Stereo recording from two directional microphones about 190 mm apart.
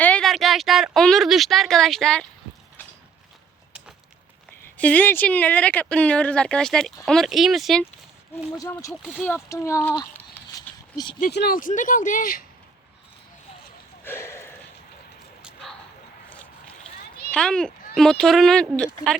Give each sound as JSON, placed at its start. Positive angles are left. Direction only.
{"t": 0.0, "sound": "speech", "side_deg": 5}
{"t": 4.8, "sound": "speech", "side_deg": 10}
{"t": 8.5, "sound": "speech", "side_deg": 15}
{"t": 8.9, "sound": "speech", "side_deg": 0}
{"t": 10.0, "sound": "a sound", "side_deg": 15}
{"t": 11.3, "sound": "speech", "side_deg": 55}
{"t": 14.0, "sound": "a sound", "side_deg": 10}
{"t": 15.4, "sound": "bow-wow", "side_deg": -5}
{"t": 17.3, "sound": "speech", "side_deg": 5}